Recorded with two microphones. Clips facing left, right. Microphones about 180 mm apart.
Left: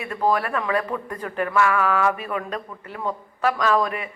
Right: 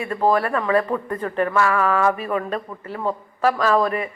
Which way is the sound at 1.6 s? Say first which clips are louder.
Even; 30° right (ahead or behind).